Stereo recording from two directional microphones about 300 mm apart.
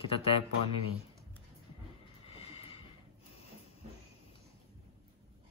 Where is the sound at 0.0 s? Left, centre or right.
Centre.